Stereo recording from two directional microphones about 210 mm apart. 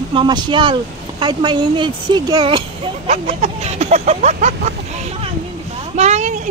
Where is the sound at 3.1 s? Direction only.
30° right (ahead or behind).